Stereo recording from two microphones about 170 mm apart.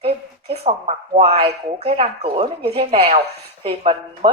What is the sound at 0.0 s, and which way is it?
Speech, 35° right (ahead or behind).